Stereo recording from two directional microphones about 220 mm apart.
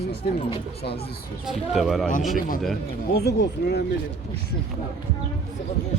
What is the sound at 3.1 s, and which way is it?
Speech, 50° left (ahead or behind).